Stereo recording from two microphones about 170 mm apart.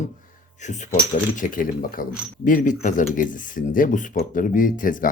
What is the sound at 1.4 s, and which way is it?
Speech, 55° left (ahead or behind).